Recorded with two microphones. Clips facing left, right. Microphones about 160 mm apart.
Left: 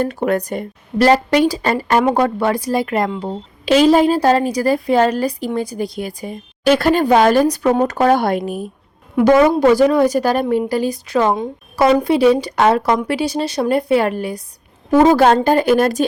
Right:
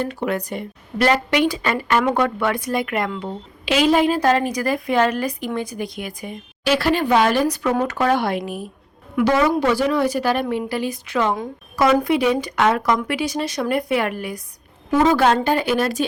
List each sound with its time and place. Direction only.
0.0 s a woman's voice: 45° left (ahead or behind)
6.7 s a woman's voice: 45° left (ahead or behind)